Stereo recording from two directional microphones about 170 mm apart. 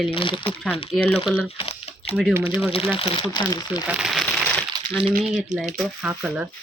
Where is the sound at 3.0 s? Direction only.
25° left (ahead or behind).